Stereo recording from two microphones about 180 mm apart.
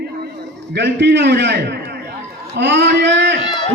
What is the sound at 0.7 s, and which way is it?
A man's voice, 70° right (ahead or behind).